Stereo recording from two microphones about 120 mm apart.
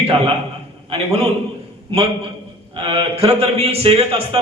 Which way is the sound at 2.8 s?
55° right (ahead or behind).